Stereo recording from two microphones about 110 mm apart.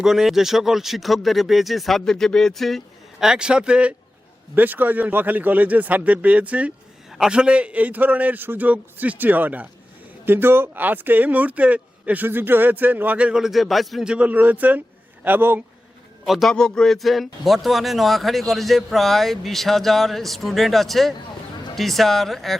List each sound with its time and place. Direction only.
0.0 s a man's voice: centre (ahead or behind); by 15.6 s 20° right (ahead or behind)
16.2 s a man's voice: centre (ahead or behind)